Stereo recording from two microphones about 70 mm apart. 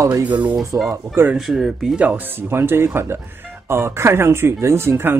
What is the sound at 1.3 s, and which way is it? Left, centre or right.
Speech, centre.